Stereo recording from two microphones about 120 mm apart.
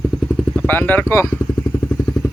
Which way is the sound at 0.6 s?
15° left (ahead or behind).